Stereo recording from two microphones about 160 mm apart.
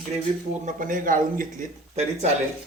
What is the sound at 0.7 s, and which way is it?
A man's voice, 55° right (ahead or behind).